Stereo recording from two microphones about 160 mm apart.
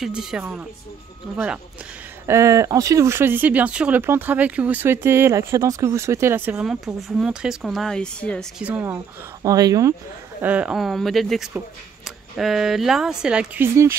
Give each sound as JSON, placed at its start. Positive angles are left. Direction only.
{"t": 0.0, "sound": "speech", "side_deg": 0}
{"t": 2.2, "sound": "speech", "side_deg": -20}
{"t": 8.5, "sound": "speech", "side_deg": -10}
{"t": 9.4, "sound": "speech", "side_deg": -20}
{"t": 10.4, "sound": "speech", "side_deg": -10}